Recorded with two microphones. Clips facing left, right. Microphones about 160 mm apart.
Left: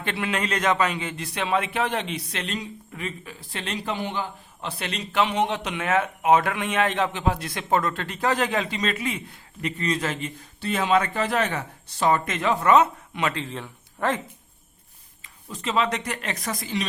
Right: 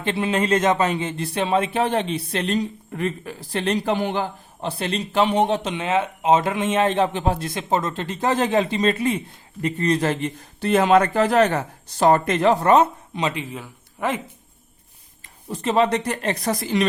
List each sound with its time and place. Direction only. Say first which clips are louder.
0.0 s a man's voice: right 5 dB; 25° right (ahead or behind)
2.9 s speech: right 8 dB; 55° right (ahead or behind)
3.5 s a man's voice: right 10 dB; 40° right (ahead or behind)
3.8 s speech: right 6 dB; 55° right (ahead or behind)
4.6 s a man's voice: right 6 dB; 30° right (ahead or behind)
5.7 s a man's voice: right 2 dB; 20° right (ahead or behind)
10.2 s speech: right 6 dB; 45° right (ahead or behind)
13.1 s speech: right 2 dB; 15° right (ahead or behind)
15.4 s speech: right 5 dB; 55° right (ahead or behind)
15.8 s a man's voice: right 6 dB; 35° right (ahead or behind)